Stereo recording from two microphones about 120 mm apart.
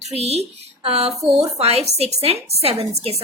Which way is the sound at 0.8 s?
55° right (ahead or behind).